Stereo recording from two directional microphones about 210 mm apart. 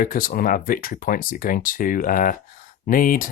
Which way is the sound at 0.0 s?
40° left (ahead or behind).